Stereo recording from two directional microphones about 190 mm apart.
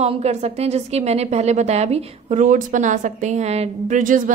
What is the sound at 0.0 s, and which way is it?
A woman's voice, 35° right (ahead or behind).